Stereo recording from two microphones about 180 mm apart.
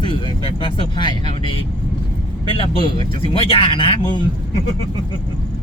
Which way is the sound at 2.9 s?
30° left (ahead or behind).